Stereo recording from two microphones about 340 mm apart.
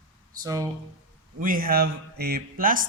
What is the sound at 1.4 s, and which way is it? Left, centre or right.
Speech, right.